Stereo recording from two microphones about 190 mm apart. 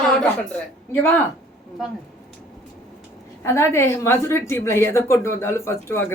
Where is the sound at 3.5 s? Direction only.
15° left (ahead or behind).